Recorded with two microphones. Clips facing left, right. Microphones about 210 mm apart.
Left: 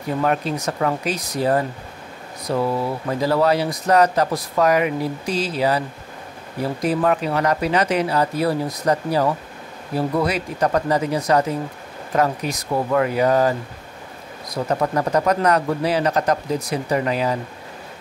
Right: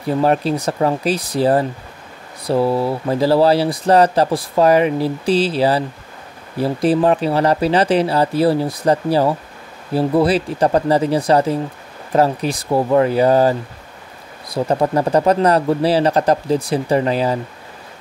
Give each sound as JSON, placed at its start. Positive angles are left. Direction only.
{"t": 0.2, "sound": "speech", "side_deg": -30}